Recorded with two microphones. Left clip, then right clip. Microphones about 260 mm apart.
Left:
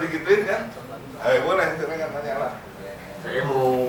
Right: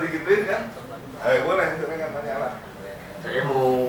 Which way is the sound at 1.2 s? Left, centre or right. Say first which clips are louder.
Left 1 dB; centre.